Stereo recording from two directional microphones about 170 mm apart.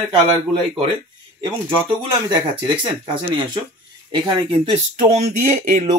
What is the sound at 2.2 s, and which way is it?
Speech, 25° right (ahead or behind).